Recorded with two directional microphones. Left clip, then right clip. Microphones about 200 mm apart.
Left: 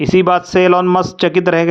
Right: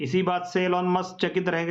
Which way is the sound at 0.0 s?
45° left (ahead or behind).